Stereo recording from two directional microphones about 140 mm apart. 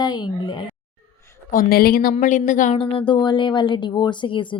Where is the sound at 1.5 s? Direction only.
90° left; by 2.8 s 65° left (ahead or behind).